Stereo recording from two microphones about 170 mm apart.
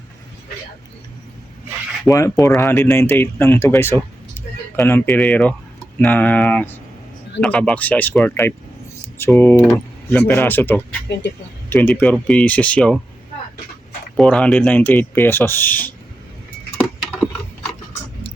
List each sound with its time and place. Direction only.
2.0 s speech: 20° left (ahead or behind)
14.2 s speech: 5° left (ahead or behind)